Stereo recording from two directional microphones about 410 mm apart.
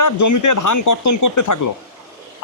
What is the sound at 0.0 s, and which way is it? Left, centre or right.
A man's voice, left.